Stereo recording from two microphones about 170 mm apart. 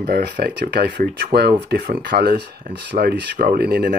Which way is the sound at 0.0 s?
65° right (ahead or behind).